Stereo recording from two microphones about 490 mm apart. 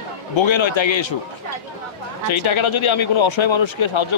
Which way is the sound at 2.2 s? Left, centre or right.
Left.